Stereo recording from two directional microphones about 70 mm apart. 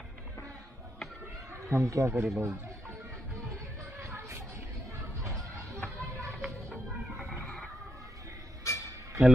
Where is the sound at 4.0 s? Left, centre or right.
Right.